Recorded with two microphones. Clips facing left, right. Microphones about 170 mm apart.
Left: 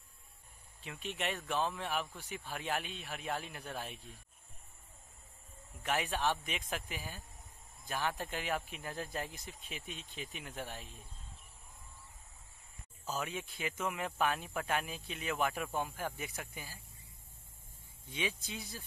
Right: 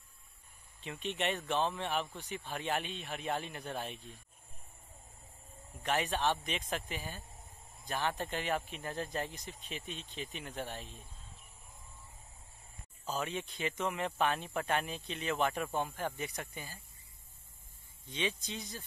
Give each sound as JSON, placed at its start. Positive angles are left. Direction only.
{"t": 0.8, "sound": "speech", "side_deg": 0}
{"t": 5.8, "sound": "speech", "side_deg": 5}
{"t": 13.0, "sound": "speech", "side_deg": 5}
{"t": 18.1, "sound": "speech", "side_deg": 10}